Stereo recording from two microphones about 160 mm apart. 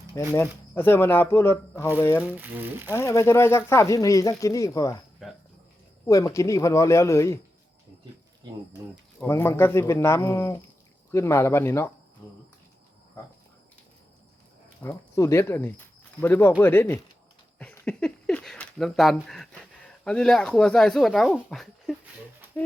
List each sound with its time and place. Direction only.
0.3 s speech: 15° left (ahead or behind)
2.3 s speech: 15° right (ahead or behind)
2.9 s speech: 15° left (ahead or behind)
6.1 s speech: 20° left (ahead or behind)
9.2 s speech: 15° left (ahead or behind)
14.8 s speech: 15° left (ahead or behind)
17.6 s a sound: 5° left (ahead or behind)
20.1 s speech: 5° left (ahead or behind)